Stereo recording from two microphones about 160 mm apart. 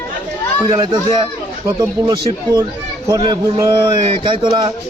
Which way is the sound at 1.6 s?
25° right (ahead or behind).